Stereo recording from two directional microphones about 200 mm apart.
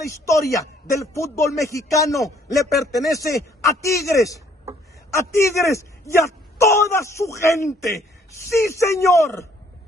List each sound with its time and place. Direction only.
0.2 s speech: 15° left (ahead or behind)